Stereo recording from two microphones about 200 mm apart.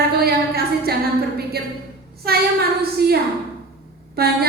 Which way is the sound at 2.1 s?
50° right (ahead or behind).